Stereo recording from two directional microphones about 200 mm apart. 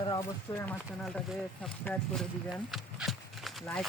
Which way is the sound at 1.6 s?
5° left (ahead or behind).